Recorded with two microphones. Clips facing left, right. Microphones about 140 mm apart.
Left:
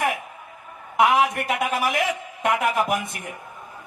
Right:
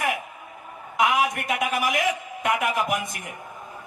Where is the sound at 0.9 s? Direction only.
30° left (ahead or behind).